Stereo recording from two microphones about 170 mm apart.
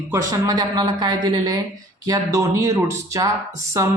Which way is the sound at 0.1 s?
20° right (ahead or behind).